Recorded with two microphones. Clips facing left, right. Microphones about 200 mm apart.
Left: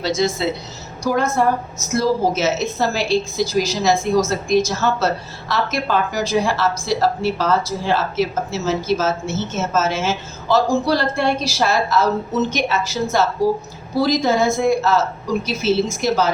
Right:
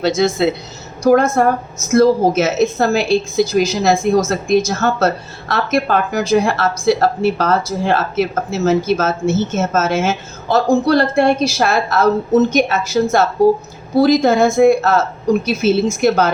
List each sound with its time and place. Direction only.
0.0 s a woman's voice: 60° right (ahead or behind)
4.4 s a woman's voice: 55° right (ahead or behind)